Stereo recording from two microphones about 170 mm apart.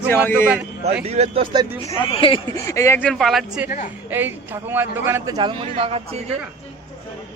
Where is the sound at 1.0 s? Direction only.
40° right (ahead or behind).